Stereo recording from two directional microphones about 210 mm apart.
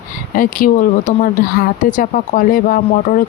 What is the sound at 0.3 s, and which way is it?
Speech, 40° left (ahead or behind).